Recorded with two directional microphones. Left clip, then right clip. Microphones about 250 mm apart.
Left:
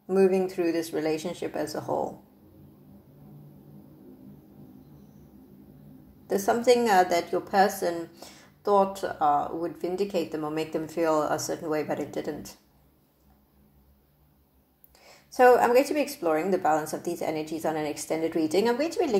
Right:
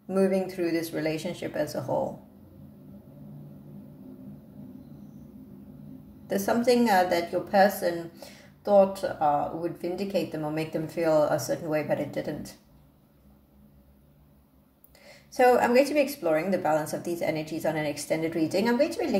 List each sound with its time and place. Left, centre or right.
0.1 s speech: centre
6.2 s speech: centre
15.3 s speech: centre